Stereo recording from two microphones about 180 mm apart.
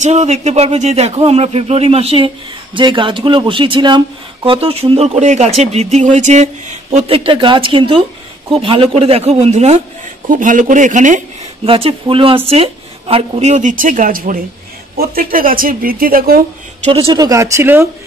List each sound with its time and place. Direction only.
0.0 s speech: 40° right (ahead or behind)
11.7 s speech: 30° right (ahead or behind); by 16.9 s 55° right (ahead or behind)
16.9 s speech: 25° right (ahead or behind)